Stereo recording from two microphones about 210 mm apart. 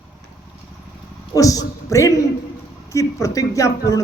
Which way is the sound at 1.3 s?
15° left (ahead or behind).